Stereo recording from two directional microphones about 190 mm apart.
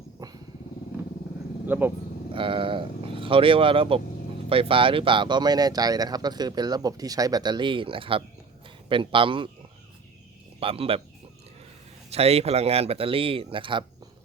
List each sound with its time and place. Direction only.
0.2 s dog: 20° right (ahead or behind)
1.6 s speech: 10° right (ahead or behind)
2.3 s a man's voice: 25° right (ahead or behind)
10.6 s speech: 30° right (ahead or behind)
12.1 s speech: 30° right (ahead or behind)